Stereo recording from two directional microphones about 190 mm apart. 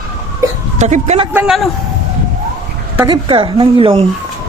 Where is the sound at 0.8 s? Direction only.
35° right (ahead or behind).